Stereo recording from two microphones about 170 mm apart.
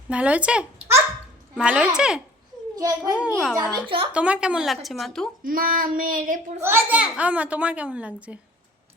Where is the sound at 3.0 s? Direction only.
5° right (ahead or behind).